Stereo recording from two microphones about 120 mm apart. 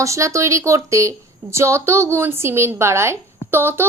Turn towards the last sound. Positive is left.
turn(degrees=-20)  # may be behind; listen again after turning